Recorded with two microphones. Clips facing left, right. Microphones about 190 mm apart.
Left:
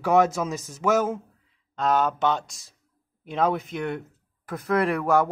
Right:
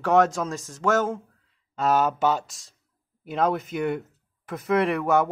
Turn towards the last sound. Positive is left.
turn(degrees=0)  # may be behind; listen again after turning